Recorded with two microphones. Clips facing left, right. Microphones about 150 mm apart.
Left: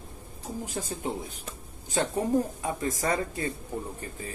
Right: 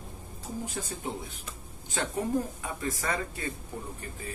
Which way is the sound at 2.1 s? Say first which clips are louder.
Left 2 dB; 30° left (ahead or behind).